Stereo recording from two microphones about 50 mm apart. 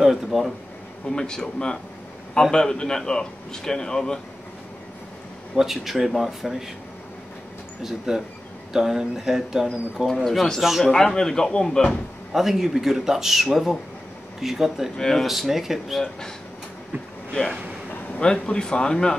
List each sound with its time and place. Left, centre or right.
0.0 s speech: centre
1.0 s a man's voice: centre
5.6 s speech: centre
7.8 s a man's voice: centre
10.0 s speech: centre
10.6 s speech: centre
10.9 s a man's voice: centre
12.3 s a man's voice: centre
15.0 s a man's voice: centre
15.2 s speech: centre
18.1 s a man's voice: centre